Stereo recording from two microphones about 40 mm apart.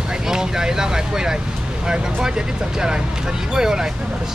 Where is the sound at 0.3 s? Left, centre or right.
Centre.